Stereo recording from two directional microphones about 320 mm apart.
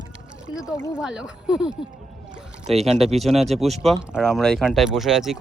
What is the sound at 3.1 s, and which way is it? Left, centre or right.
Speech, centre.